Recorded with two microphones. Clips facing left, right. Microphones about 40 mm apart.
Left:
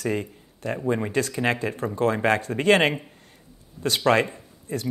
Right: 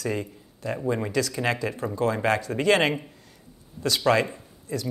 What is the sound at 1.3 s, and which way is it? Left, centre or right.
Speech, left.